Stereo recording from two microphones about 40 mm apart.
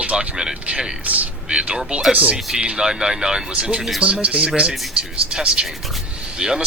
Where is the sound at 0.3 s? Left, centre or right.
Centre.